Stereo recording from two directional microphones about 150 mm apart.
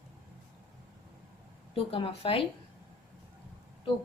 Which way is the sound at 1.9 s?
40° left (ahead or behind).